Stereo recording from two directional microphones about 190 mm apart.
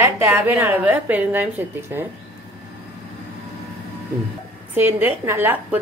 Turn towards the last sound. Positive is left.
turn(degrees=-10)  # may be behind; listen again after turning